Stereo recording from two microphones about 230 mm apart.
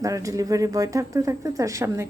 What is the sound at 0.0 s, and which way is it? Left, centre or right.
A woman's voice, centre.